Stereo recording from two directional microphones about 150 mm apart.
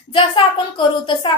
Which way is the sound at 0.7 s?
30° left (ahead or behind).